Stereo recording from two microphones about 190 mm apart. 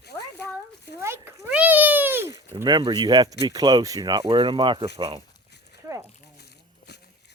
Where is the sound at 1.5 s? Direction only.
10° right (ahead or behind).